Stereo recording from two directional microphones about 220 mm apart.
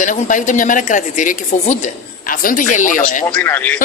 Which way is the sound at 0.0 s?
35° left (ahead or behind).